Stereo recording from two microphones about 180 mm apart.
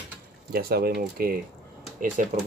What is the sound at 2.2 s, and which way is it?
Speech, 45° right (ahead or behind).